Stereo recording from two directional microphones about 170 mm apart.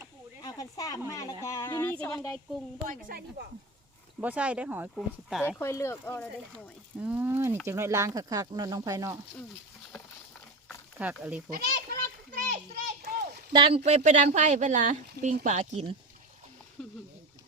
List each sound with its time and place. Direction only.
0.4 s a woman's voice: 20° left (ahead or behind)
2.8 s a woman's voice: 55° right (ahead or behind)
4.2 s speech: 10° right (ahead or behind)
5.5 s speech: 15° left (ahead or behind)
7.0 s speech: 10° right (ahead or behind)
11.1 s speech: 5° right (ahead or behind)
11.5 s children playing: 60° right (ahead or behind)
13.0 s a sound: 70° right (ahead or behind)
13.5 s speech: 35° right (ahead or behind)
16.8 s a sound: 5° left (ahead or behind)